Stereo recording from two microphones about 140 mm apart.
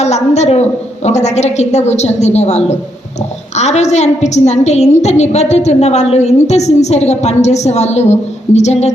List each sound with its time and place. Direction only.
0.0 s a woman's voice: 55° left (ahead or behind)